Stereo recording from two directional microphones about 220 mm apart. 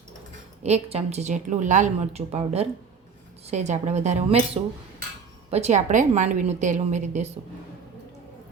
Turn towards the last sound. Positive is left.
turn(degrees=-30)  # may be behind; listen again after turning